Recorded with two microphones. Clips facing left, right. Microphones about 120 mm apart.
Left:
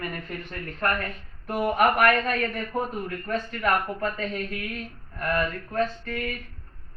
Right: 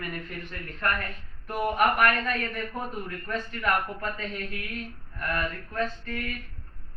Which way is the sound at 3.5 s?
55° left (ahead or behind).